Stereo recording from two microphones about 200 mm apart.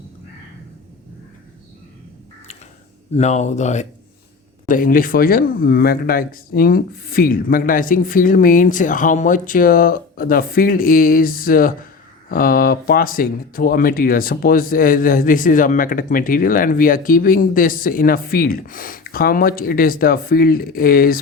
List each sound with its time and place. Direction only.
3.2 s speech: 35° left (ahead or behind)